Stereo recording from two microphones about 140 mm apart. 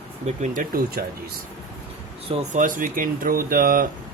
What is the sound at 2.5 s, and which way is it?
Speech, 75° right (ahead or behind).